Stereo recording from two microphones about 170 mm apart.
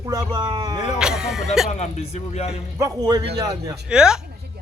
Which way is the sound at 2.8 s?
20° right (ahead or behind).